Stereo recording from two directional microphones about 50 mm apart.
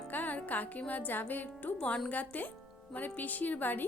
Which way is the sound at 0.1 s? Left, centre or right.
Left.